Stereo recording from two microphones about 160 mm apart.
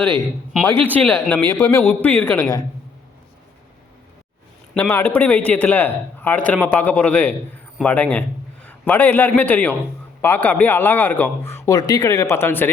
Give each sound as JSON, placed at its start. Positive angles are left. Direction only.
{"t": 0.6, "sound": "speech", "side_deg": 10}
{"t": 1.5, "sound": "speech", "side_deg": 20}
{"t": 4.7, "sound": "speech", "side_deg": 15}